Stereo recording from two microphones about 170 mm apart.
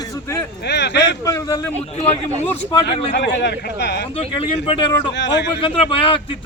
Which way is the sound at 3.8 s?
75° left (ahead or behind).